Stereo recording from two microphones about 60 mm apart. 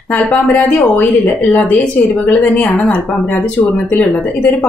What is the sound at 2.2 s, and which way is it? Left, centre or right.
Speech, left.